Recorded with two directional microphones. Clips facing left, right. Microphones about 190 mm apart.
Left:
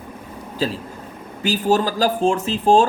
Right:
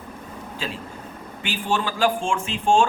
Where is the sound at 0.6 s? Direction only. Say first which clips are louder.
Left 9 dB; 35° left (ahead or behind).